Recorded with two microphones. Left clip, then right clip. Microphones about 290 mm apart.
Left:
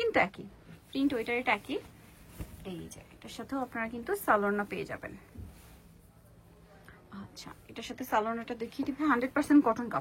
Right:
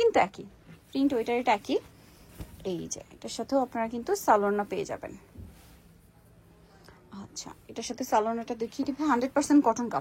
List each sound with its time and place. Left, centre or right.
0.0 s a woman's voice: centre
6.9 s a woman's voice: centre